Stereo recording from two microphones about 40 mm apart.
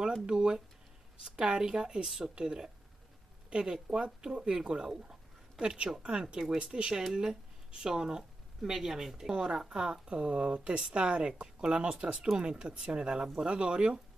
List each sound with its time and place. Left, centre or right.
0.3 s speech: right
6.9 s speech: centre